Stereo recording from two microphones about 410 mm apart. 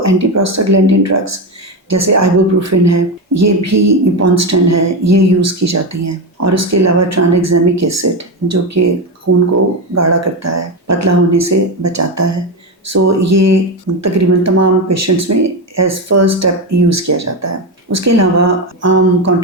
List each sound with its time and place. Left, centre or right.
0.0 s speech: right